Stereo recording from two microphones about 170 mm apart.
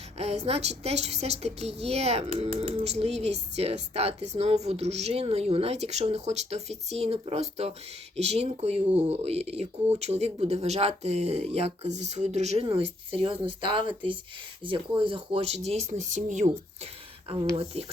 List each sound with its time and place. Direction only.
0.2 s speech: 40° right (ahead or behind)
17.2 s speech: 35° right (ahead or behind)